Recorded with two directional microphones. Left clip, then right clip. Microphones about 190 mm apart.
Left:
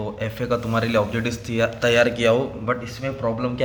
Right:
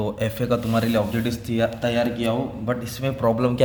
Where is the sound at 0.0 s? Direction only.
20° right (ahead or behind); by 1.7 s centre (ahead or behind).